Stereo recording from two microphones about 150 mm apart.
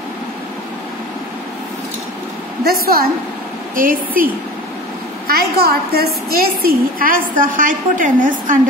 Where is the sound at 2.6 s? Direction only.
85° right.